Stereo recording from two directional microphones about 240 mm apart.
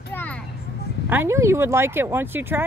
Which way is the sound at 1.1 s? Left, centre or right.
Centre.